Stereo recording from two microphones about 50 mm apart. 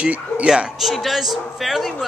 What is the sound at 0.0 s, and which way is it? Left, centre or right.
Speech, right.